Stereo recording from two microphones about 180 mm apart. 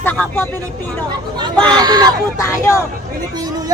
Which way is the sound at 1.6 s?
25° right (ahead or behind).